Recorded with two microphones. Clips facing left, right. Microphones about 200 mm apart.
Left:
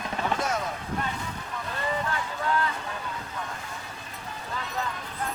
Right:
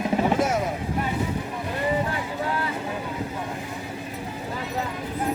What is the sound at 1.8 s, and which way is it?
Boat, 15° right (ahead or behind).